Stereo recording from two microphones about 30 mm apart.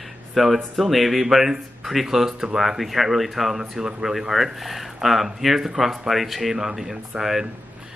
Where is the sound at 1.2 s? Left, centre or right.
Centre.